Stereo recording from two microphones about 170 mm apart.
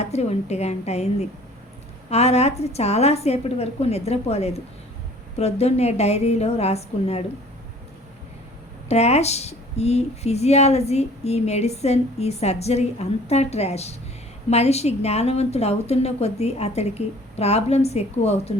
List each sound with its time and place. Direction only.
0.0 s speech: 40° left (ahead or behind)
8.9 s speech: 40° left (ahead or behind)